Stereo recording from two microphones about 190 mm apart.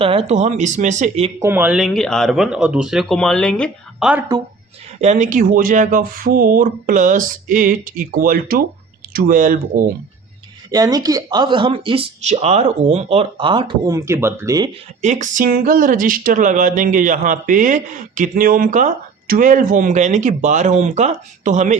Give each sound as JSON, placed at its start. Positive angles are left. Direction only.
{"t": 0.0, "sound": "speech", "side_deg": -30}
{"t": 1.4, "sound": "speech", "side_deg": -10}
{"t": 4.9, "sound": "speech", "side_deg": -40}
{"t": 10.7, "sound": "speech", "side_deg": -20}
{"t": 15.0, "sound": "speech", "side_deg": -40}